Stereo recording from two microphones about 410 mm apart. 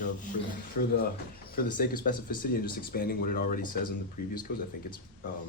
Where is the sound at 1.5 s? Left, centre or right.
Left.